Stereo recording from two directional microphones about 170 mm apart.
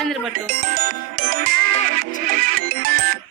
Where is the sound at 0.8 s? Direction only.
55° right (ahead or behind).